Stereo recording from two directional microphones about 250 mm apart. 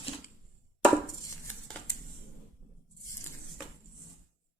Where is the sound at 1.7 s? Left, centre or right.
Centre.